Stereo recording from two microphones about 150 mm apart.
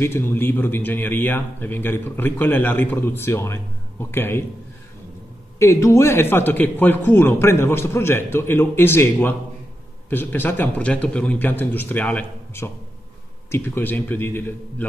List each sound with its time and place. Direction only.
0.0 s a man's voice: 15° left (ahead or behind)
5.6 s a man's voice: 20° left (ahead or behind)